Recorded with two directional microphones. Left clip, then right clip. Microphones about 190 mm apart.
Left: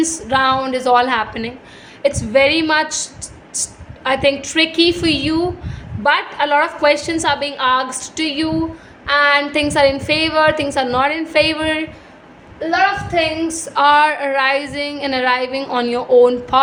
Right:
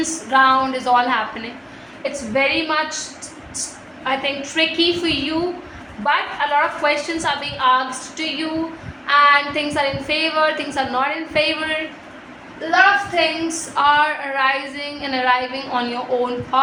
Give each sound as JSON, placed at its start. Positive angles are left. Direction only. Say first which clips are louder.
{"t": 0.0, "sound": "a woman's voice", "louder": "even", "side_deg": 60}
{"t": 12.7, "sound": "a woman's voice", "louder": "right 1 dB", "side_deg": 60}